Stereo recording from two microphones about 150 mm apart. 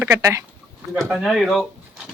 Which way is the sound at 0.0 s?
20° right (ahead or behind).